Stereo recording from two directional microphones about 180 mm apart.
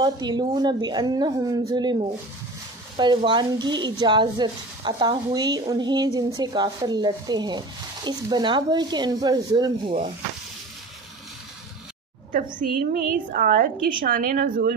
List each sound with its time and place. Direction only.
0.0 s a woman's voice: 25° right (ahead or behind)
3.3 s a woman's voice: 25° right (ahead or behind)
12.5 s a woman's voice: 55° right (ahead or behind)